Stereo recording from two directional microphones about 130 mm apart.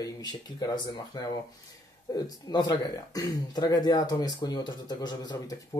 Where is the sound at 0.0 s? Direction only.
30° left (ahead or behind).